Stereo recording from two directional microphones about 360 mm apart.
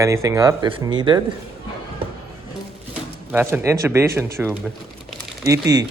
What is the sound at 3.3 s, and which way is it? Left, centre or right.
Speech, centre.